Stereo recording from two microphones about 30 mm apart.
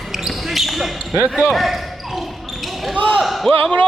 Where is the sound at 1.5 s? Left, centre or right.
Centre.